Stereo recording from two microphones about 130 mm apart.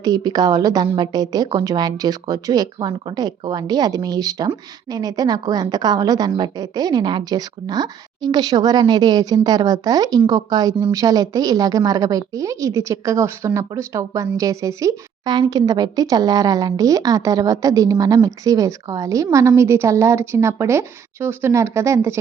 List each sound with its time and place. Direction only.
0.0 s a woman's voice: 30° right (ahead or behind)